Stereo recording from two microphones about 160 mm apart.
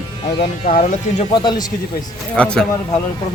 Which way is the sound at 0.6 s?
55° left (ahead or behind).